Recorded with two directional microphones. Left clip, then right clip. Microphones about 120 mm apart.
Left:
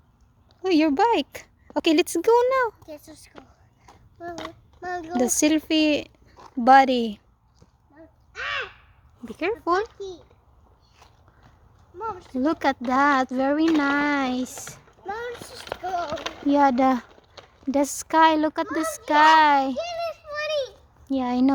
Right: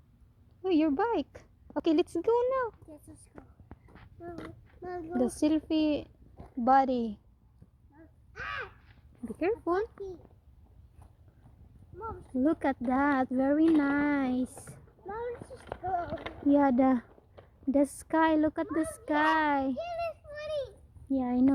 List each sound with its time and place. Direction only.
0.6 s speech: 30° left (ahead or behind)
2.8 s speech: centre (ahead or behind)
4.8 s speech: 5° left (ahead or behind)
5.1 s speech: 30° left (ahead or behind)
6.6 s a woman's voice: 45° left (ahead or behind)
8.4 s crow: 45° right (ahead or behind)
9.2 s speech: 15° right (ahead or behind)
9.6 s speech: centre (ahead or behind)
12.4 s speech: centre (ahead or behind)
15.0 s speech: centre (ahead or behind)
16.0 s a child's voice: 30° right (ahead or behind)
16.5 s speech: 10° right (ahead or behind)
19.9 s a sound: 35° right (ahead or behind)
21.1 s speech: 10° left (ahead or behind)